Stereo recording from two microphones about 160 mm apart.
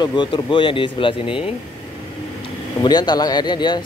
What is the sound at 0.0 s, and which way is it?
Speech, 30° left (ahead or behind).